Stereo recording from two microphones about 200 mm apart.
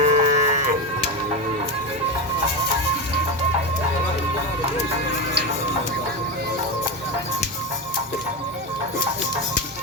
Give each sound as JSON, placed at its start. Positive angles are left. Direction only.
{"t": 0.0, "sound": "music", "side_deg": -40}